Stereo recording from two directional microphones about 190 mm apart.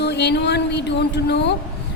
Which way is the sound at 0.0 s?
65° left (ahead or behind).